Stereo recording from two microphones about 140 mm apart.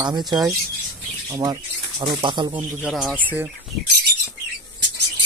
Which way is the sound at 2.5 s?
10° right (ahead or behind).